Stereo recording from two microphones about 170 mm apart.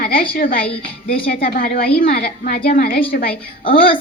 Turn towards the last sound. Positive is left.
turn(degrees=55)  # may be behind; listen again after turning